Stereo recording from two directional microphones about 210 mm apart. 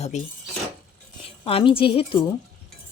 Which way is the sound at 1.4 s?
25° left (ahead or behind).